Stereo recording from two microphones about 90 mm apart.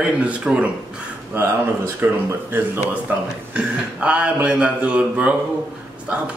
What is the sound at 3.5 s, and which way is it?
Speech, 10° right (ahead or behind).